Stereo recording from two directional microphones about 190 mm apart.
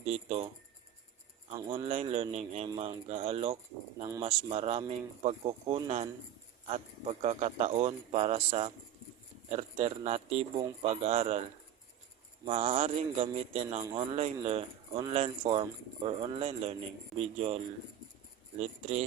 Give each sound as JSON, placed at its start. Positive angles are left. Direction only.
{"t": 1.5, "sound": "speech", "side_deg": -25}
{"t": 12.5, "sound": "speech", "side_deg": -30}